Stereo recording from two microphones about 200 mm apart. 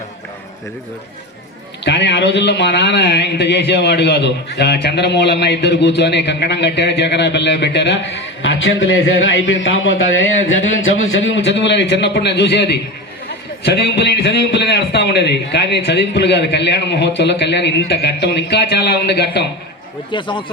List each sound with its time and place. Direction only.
1.8 s a man's voice: 60° left (ahead or behind)
20.1 s speech: 25° left (ahead or behind)